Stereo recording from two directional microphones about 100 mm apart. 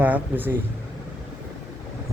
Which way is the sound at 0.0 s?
20° right (ahead or behind).